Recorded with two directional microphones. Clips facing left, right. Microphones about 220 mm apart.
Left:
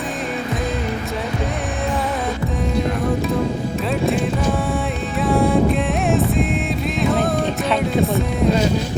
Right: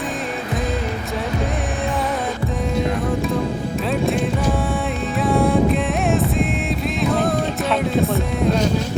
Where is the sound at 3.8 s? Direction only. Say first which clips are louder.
Even; centre (ahead or behind).